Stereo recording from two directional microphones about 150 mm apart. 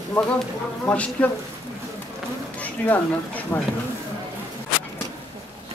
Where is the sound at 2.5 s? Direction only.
10° left (ahead or behind).